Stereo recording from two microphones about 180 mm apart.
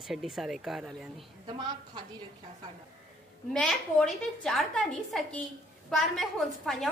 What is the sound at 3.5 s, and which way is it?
A woman's voice, 5° left (ahead or behind).